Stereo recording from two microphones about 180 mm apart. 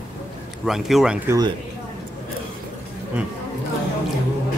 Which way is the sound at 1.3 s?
20° right (ahead or behind).